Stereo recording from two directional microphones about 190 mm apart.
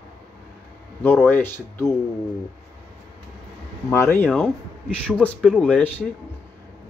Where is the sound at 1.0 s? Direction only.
10° left (ahead or behind).